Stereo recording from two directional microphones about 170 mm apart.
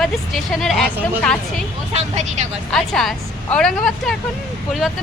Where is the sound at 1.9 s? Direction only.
45° right (ahead or behind).